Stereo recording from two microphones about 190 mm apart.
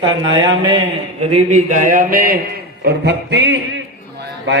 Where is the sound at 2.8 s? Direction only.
60° right (ahead or behind).